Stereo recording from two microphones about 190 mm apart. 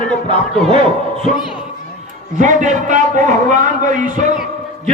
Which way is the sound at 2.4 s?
40° right (ahead or behind).